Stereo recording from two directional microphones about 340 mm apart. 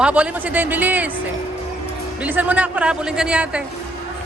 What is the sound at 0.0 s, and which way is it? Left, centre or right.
A man's voice, centre.